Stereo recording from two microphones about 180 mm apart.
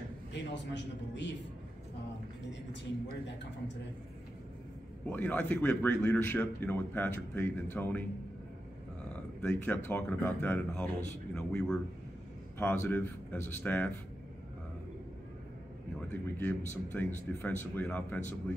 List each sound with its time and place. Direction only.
0.3 s a man's voice: 75° left (ahead or behind)
5.1 s a man's voice: 10° left (ahead or behind)
9.1 s a sound: 10° left (ahead or behind)
9.8 s a man's voice: 10° left (ahead or behind)
16.1 s a man's voice: 10° left (ahead or behind)